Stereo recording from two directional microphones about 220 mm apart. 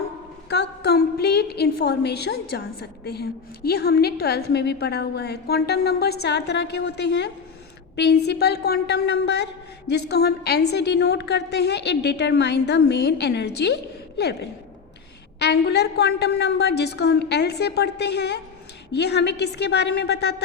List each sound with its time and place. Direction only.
0.5 s a woman's voice: 50° left (ahead or behind)
15.4 s a woman's voice: 50° left (ahead or behind)